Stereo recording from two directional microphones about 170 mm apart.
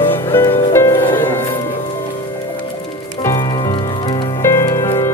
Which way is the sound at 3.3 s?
20° left (ahead or behind).